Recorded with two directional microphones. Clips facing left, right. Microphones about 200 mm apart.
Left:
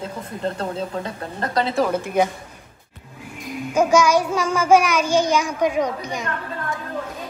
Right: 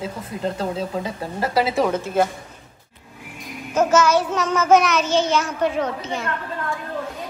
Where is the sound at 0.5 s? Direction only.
5° right (ahead or behind).